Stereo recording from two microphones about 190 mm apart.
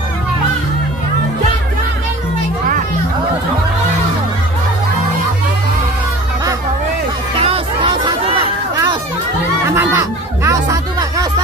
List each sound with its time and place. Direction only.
7.4 s chatter: 30° right (ahead or behind)
9.8 s music: 15° right (ahead or behind)